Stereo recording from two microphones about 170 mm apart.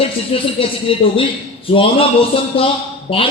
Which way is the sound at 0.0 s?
35° left (ahead or behind).